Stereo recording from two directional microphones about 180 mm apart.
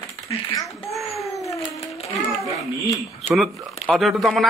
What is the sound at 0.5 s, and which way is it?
Speech, centre (ahead or behind).